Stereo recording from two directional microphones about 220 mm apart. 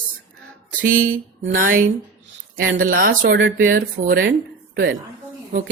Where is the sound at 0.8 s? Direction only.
40° right (ahead or behind).